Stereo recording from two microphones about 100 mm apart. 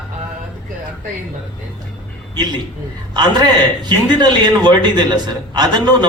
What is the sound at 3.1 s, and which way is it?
A man's voice, 45° right (ahead or behind).